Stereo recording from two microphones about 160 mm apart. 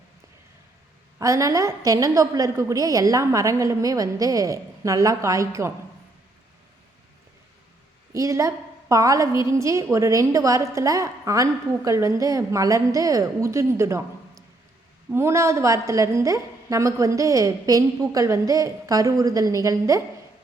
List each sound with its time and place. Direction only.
1.2 s a woman's voice: 20° right (ahead or behind)
8.1 s a woman's voice: 20° right (ahead or behind)
15.1 s a woman's voice: 15° right (ahead or behind)